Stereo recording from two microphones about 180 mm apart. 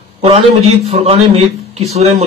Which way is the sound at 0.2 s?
30° right (ahead or behind).